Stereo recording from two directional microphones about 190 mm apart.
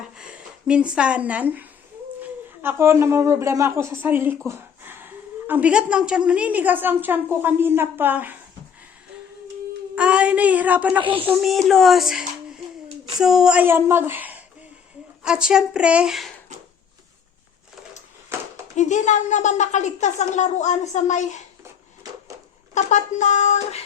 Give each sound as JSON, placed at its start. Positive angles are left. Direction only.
{"t": 0.7, "sound": "a woman's voice", "side_deg": -5}
{"t": 9.9, "sound": "a sound", "side_deg": -5}
{"t": 11.3, "sound": "a woman's voice", "side_deg": 0}
{"t": 18.8, "sound": "a woman's voice", "side_deg": 40}
{"t": 21.6, "sound": "a sound", "side_deg": -15}
{"t": 22.7, "sound": "speech", "side_deg": 40}